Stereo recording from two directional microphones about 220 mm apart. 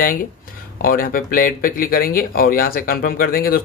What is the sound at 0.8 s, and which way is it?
Speech, 40° left (ahead or behind).